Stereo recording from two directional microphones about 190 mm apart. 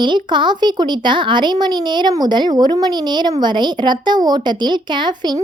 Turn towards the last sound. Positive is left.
turn(degrees=-25)  # may be behind; listen again after turning